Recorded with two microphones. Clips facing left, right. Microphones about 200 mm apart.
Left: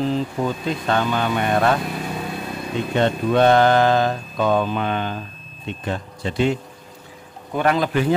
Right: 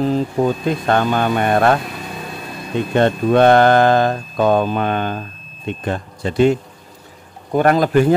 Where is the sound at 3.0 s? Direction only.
55° right (ahead or behind).